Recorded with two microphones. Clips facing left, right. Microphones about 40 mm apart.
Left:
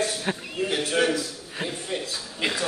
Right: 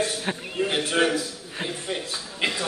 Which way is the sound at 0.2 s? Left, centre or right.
Centre.